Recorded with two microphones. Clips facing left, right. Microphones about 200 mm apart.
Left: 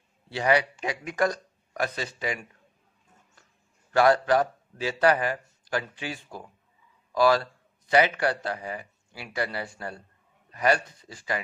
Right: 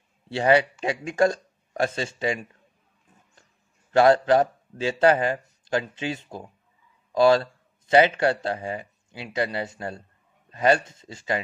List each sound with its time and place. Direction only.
0.3 s speech: 30° right (ahead or behind)
3.9 s speech: 25° right (ahead or behind)